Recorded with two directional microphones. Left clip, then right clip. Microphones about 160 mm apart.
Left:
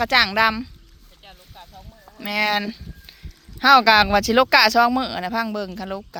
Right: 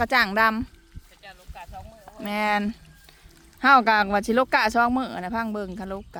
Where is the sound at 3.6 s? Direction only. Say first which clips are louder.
Left 4 dB; 10° left (ahead or behind).